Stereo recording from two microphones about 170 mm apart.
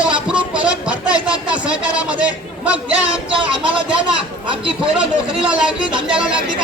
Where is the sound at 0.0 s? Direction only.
5° right (ahead or behind).